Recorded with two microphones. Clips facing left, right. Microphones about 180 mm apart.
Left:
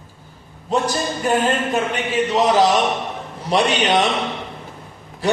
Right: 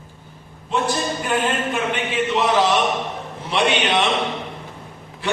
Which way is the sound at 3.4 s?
40° left (ahead or behind).